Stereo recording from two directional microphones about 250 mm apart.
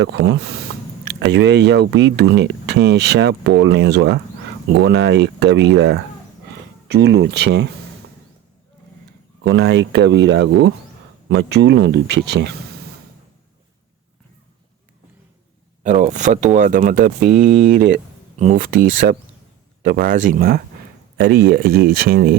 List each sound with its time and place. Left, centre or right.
0.0 s speech: right
9.4 s speech: right
15.8 s speech: right